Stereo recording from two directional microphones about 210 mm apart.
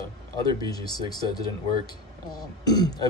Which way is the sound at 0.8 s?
20° left (ahead or behind).